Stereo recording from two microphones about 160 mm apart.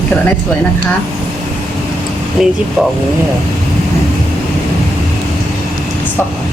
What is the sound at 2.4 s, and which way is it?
Speech, 5° right (ahead or behind).